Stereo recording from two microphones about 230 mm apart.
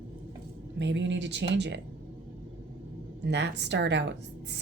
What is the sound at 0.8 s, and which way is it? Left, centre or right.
Speech, right.